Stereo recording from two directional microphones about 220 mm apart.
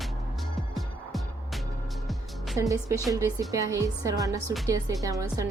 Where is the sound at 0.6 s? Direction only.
Centre (ahead or behind).